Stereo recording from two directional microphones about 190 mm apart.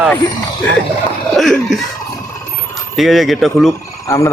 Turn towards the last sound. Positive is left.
turn(degrees=15)  # may be behind; listen again after turning